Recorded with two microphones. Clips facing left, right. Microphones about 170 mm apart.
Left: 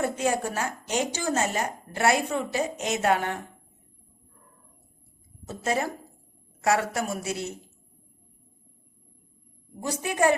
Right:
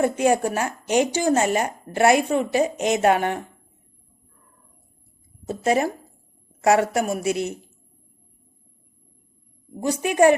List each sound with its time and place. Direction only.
0.0 s speech: 15° right (ahead or behind)
5.5 s speech: 15° right (ahead or behind)
10.0 s speech: 15° right (ahead or behind)